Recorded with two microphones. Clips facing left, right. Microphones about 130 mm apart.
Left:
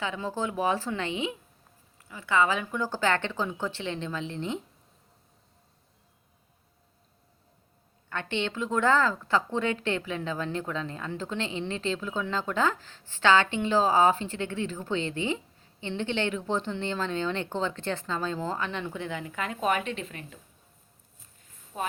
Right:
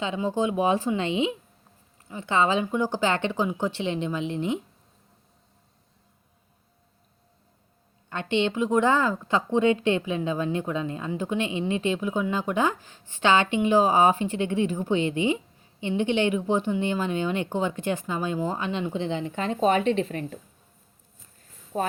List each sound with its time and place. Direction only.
0.0 s a woman's voice: 20° right (ahead or behind)
8.1 s a woman's voice: 20° right (ahead or behind); by 20.4 s 35° right (ahead or behind)
21.7 s speech: 40° right (ahead or behind)